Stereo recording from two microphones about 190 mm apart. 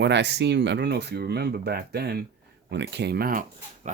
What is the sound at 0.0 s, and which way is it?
Speech, 65° right (ahead or behind).